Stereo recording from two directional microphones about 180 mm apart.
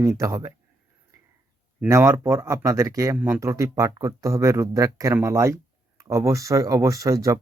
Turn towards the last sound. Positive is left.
turn(degrees=-20)  # may be behind; listen again after turning